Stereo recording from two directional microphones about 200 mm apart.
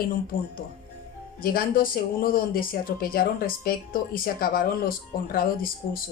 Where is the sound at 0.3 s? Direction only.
45° left (ahead or behind).